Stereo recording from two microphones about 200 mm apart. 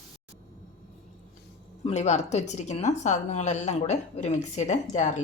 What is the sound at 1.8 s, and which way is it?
Speech, 35° left (ahead or behind).